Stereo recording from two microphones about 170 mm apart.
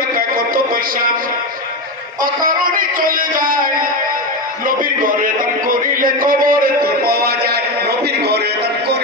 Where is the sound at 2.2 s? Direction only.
55° right (ahead or behind).